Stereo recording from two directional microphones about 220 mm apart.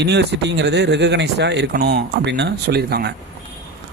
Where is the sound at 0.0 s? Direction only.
50° right (ahead or behind).